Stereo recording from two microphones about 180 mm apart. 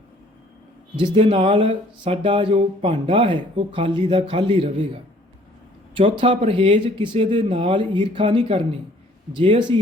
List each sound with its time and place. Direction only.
0.9 s speech: 30° right (ahead or behind)
5.9 s speech: 30° right (ahead or behind)